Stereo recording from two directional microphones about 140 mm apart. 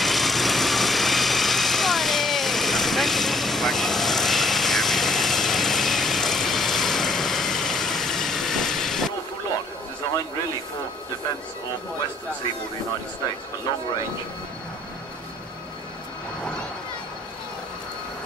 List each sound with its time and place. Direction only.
0.0 s vehicle: centre (ahead or behind)